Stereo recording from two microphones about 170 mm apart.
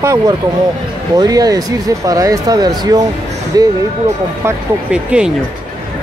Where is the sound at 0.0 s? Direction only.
15° right (ahead or behind).